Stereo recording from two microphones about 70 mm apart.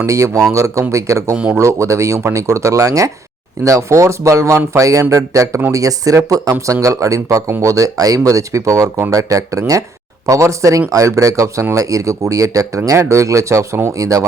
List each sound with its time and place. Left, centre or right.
0.0 s speech: right